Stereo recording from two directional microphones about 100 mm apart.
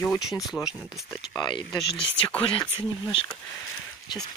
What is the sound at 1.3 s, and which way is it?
Speech, 50° left (ahead or behind).